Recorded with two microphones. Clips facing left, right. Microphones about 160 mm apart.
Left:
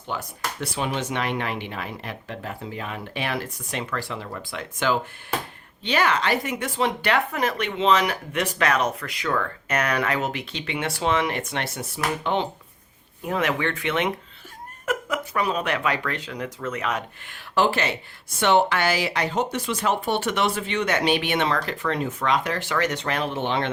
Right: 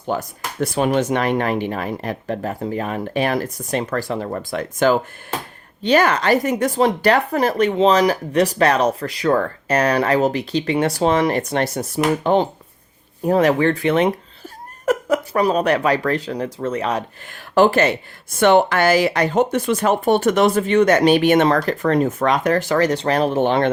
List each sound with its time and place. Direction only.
0.1 s speech: 45° right (ahead or behind)
17.5 s speech: 45° right (ahead or behind)